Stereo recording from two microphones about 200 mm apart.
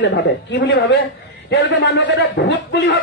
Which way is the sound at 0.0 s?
60° left (ahead or behind).